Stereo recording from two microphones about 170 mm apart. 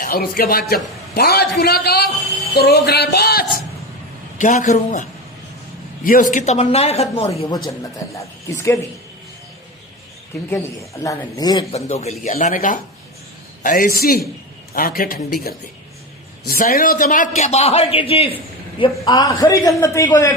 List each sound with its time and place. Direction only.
0.0 s a man's voice: 60° left (ahead or behind)
1.1 s music: 65° left (ahead or behind)
4.4 s a man's voice: 45° left (ahead or behind)
6.1 s a man's voice: 50° left (ahead or behind)
8.1 s speech: 15° left (ahead or behind)
11.0 s a man's voice: 20° left (ahead or behind)
11.7 s a man's voice: 40° left (ahead or behind)
12.2 s a man's voice: 50° left (ahead or behind); by 20.3 s 15° left (ahead or behind)